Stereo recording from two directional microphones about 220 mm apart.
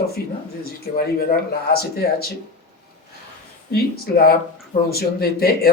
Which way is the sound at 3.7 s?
45° left (ahead or behind).